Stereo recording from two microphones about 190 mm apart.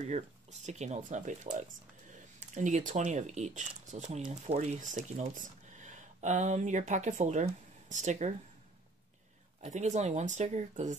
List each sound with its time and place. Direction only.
0.1 s speech: 35° right (ahead or behind)
9.6 s speech: 40° right (ahead or behind)